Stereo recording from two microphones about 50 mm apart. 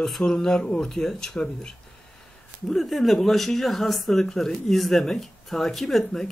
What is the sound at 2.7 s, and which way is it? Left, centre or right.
Speech, centre.